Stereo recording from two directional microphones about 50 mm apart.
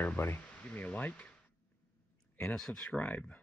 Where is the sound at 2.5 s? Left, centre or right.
Left.